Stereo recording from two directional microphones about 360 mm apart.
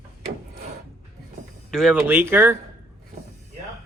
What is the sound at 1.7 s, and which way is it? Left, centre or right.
Speech, centre.